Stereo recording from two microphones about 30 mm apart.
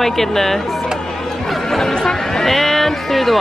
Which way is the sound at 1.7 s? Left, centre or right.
Centre.